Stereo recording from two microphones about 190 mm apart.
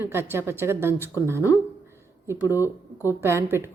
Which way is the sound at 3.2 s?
15° right (ahead or behind).